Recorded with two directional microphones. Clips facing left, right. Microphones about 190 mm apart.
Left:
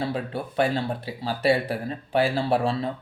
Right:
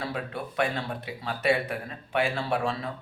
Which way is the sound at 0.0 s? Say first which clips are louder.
Left 5 dB; 30° left (ahead or behind).